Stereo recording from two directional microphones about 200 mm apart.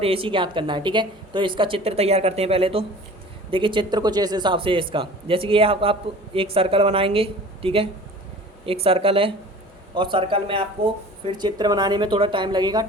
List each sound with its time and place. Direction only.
0.0 s a man's voice: 25° right (ahead or behind)